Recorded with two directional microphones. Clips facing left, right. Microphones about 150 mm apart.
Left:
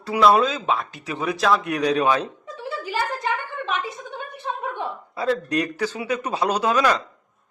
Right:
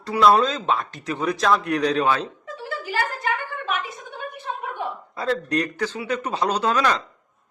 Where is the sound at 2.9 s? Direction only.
20° left (ahead or behind).